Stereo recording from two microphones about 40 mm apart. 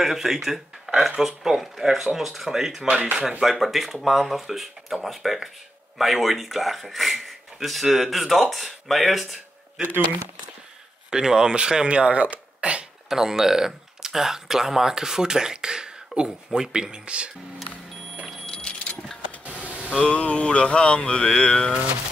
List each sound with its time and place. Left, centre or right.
0.0 s speech: centre
11.1 s speech: centre
13.1 s speech: centre; by 17.3 s right
18.5 s a sound: centre
19.6 s a sound: right
20.1 s cattle: left